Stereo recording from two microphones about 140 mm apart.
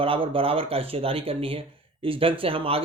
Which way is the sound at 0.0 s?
40° right (ahead or behind).